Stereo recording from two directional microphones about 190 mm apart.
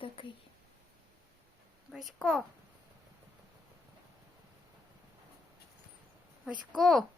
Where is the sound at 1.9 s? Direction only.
Centre (ahead or behind).